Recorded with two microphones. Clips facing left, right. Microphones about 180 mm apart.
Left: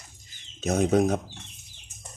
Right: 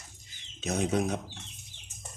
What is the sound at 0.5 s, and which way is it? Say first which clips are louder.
Speech: left 6 dB; 50° left (ahead or behind).